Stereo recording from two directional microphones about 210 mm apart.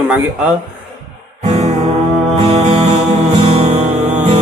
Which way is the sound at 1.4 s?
25° right (ahead or behind).